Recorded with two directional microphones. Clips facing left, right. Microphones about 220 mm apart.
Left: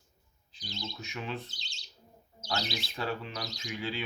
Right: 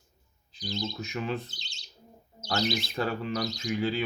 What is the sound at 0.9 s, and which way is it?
Speech, 45° right (ahead or behind).